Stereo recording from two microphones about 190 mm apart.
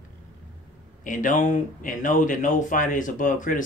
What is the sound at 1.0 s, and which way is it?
Speech, 45° left (ahead or behind).